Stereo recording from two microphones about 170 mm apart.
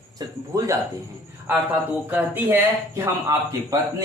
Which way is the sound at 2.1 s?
10° right (ahead or behind).